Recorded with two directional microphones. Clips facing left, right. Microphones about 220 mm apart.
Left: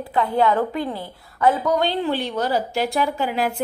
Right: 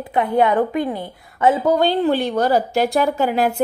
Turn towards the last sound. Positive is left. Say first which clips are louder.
# right 4 dB
turn(degrees=-45)  # may be behind; listen again after turning